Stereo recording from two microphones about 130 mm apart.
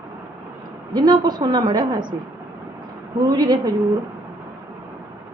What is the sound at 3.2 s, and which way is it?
Speech, 35° right (ahead or behind).